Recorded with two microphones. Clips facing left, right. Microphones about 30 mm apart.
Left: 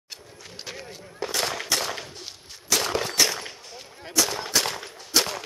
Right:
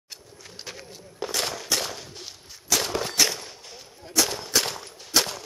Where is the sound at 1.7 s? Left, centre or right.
Centre.